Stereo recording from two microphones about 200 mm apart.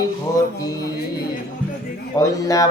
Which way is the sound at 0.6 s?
20° left (ahead or behind).